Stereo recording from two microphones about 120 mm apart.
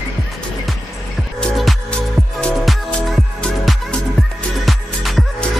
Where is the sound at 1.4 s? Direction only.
Centre (ahead or behind).